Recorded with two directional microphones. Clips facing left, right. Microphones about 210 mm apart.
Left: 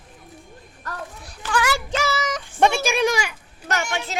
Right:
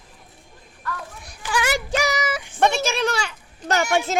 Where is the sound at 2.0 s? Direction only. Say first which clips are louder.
Right 1 dB; 15° right (ahead or behind).